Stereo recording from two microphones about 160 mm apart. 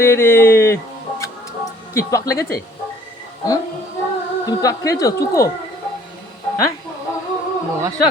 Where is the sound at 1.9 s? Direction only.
20° left (ahead or behind).